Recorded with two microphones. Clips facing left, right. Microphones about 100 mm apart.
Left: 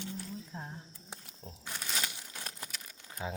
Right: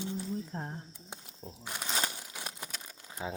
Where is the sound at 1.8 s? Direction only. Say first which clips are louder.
Right 4 dB; 35° right (ahead or behind).